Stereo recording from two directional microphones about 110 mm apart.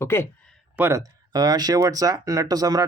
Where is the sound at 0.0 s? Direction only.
20° left (ahead or behind).